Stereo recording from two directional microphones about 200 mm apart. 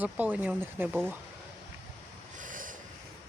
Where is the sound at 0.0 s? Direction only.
10° right (ahead or behind).